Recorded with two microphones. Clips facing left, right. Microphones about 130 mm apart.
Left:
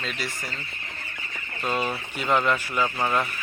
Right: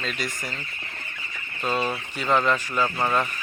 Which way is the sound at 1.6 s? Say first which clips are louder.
Right 1 dB; 10° left (ahead or behind).